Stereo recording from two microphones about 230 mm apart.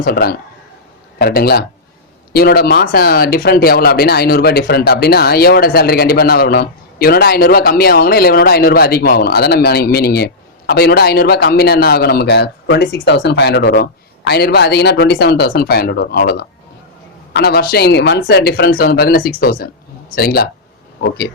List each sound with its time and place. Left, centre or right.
0.0 s speech: left